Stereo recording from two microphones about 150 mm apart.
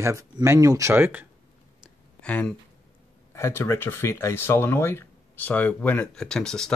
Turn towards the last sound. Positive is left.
turn(degrees=5)  # may be behind; listen again after turning